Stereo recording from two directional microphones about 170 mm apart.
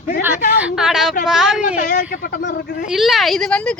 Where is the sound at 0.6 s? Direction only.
5° right (ahead or behind).